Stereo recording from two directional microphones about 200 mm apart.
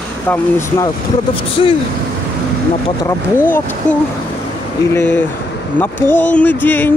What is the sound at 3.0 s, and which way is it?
Speech, 10° left (ahead or behind).